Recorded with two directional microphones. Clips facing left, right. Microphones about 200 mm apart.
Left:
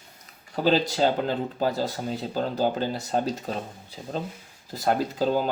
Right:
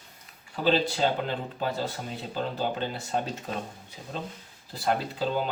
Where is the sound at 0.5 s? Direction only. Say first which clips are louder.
Left 2 dB; 40° left (ahead or behind).